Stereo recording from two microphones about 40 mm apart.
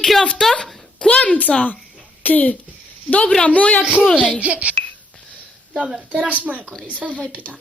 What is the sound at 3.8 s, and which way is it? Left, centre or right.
Speech, right.